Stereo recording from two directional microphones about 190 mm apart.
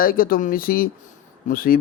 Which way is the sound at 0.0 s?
50° left (ahead or behind).